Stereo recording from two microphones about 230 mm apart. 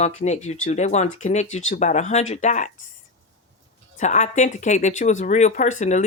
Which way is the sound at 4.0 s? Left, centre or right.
Left.